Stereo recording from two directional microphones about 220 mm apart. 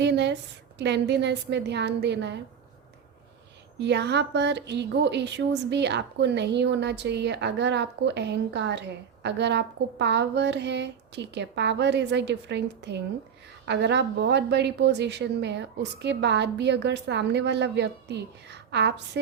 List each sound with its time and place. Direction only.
0.0 s a woman's voice: 50° right (ahead or behind)
3.8 s a woman's voice: 50° right (ahead or behind)